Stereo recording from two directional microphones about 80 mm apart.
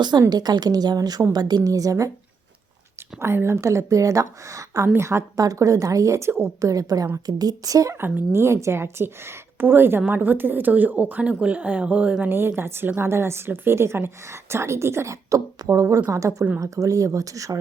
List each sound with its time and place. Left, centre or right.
0.2 s a woman's voice: right
3.2 s a woman's voice: right
8.0 s a woman's voice: right